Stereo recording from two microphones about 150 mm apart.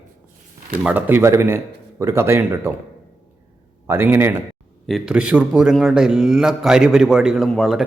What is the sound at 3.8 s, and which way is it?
Speech, 15° right (ahead or behind).